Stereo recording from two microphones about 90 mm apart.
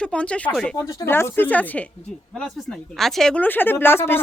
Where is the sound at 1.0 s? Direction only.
25° left (ahead or behind).